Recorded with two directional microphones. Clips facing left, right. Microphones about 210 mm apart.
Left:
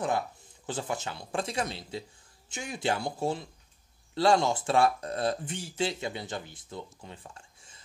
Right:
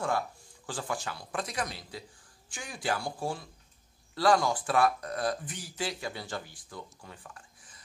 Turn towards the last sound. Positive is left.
turn(degrees=25)  # may be behind; listen again after turning